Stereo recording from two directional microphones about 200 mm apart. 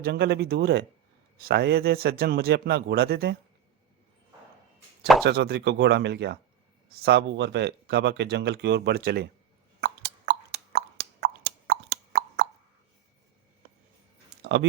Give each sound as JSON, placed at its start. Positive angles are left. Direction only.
{"t": 0.0, "sound": "speech", "side_deg": -55}
{"t": 5.2, "sound": "speech", "side_deg": -55}
{"t": 9.8, "sound": "plop", "side_deg": -55}
{"t": 14.4, "sound": "a sound", "side_deg": -60}